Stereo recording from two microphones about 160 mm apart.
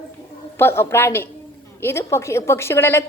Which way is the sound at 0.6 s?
15° left (ahead or behind).